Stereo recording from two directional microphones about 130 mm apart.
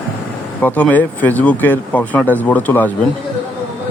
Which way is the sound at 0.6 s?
10° left (ahead or behind).